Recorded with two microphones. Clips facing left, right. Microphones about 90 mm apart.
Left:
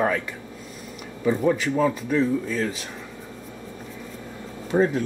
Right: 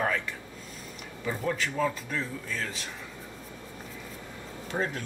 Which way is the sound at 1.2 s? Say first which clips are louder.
Left 9 dB; 15° left (ahead or behind).